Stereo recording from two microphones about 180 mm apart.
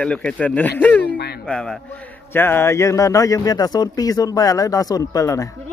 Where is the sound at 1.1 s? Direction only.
65° left (ahead or behind).